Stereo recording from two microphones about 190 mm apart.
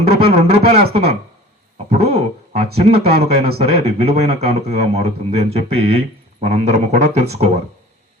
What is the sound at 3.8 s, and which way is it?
A man's voice, 35° right (ahead or behind).